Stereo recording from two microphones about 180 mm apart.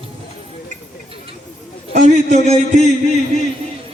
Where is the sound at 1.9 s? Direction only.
45° right (ahead or behind).